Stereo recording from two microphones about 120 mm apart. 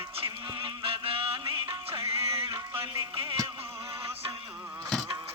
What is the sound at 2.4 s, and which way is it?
Music, 35° right (ahead or behind).